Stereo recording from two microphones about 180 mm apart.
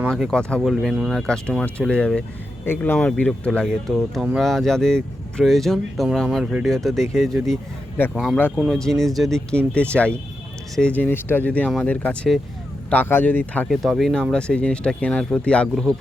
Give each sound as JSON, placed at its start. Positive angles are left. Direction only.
{"t": 0.1, "sound": "speech", "side_deg": 5}